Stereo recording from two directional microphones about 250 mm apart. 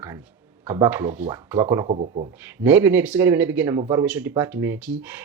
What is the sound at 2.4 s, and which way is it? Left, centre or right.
Speech, centre.